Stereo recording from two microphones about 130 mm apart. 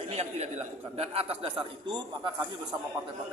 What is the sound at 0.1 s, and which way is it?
A man's voice, 55° right (ahead or behind).